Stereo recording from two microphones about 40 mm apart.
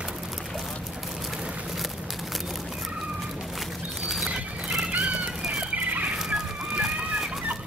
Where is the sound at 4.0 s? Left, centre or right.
Centre.